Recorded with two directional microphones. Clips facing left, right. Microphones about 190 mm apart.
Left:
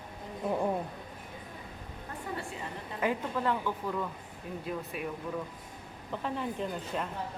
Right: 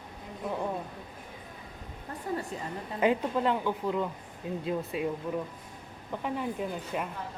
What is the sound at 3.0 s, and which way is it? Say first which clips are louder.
Speech: right 5 dB; 20° right (ahead or behind).